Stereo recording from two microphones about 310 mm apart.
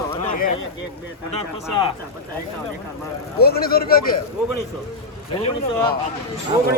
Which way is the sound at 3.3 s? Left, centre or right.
Left.